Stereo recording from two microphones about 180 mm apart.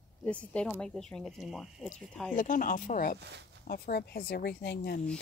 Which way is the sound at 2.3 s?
50° left (ahead or behind).